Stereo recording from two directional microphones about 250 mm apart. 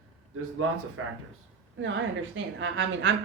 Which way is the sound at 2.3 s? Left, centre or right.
Right.